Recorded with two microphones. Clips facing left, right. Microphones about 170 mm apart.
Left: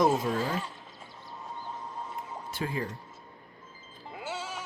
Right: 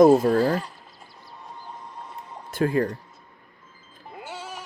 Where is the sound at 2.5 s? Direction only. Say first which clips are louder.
Right 11 dB; 55° right (ahead or behind).